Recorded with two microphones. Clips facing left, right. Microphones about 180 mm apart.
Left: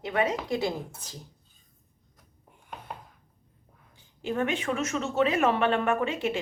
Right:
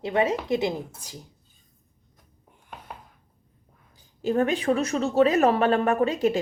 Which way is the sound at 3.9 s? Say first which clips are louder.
Right 6 dB; 40° right (ahead or behind).